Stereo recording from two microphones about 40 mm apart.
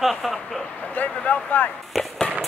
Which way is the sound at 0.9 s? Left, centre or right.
Left.